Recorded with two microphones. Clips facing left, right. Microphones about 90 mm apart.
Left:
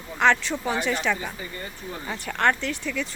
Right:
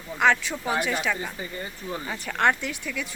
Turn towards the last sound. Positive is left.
turn(degrees=-10)  # may be behind; listen again after turning